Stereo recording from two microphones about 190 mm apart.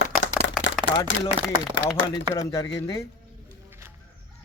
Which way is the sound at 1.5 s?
80° left.